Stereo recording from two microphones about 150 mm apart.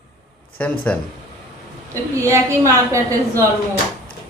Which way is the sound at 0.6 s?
10° left (ahead or behind).